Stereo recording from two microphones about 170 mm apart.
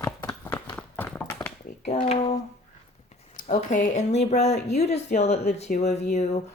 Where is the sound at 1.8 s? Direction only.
35° left (ahead or behind).